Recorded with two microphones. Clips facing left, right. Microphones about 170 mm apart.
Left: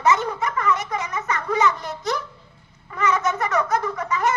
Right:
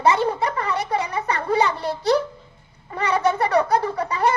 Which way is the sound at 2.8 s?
35° right (ahead or behind).